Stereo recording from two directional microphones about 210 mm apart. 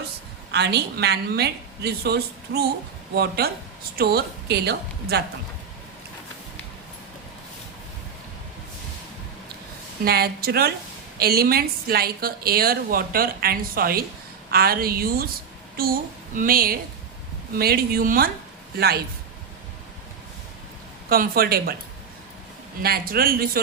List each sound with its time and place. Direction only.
0.5 s a woman's voice: 50° right (ahead or behind)
10.0 s a woman's voice: 45° right (ahead or behind)
21.1 s a woman's voice: 45° right (ahead or behind)
22.8 s a woman's voice: 45° right (ahead or behind)